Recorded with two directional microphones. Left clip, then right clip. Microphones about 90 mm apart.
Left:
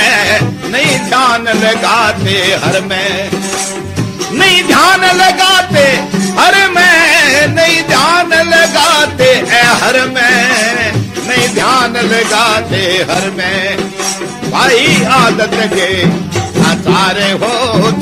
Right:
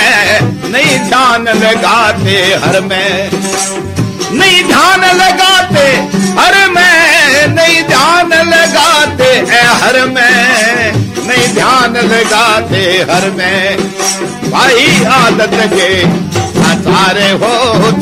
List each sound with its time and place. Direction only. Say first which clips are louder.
0.0 s music: right 2 dB; 35° left (ahead or behind)
4.4 s music: right 1 dB; 35° left (ahead or behind)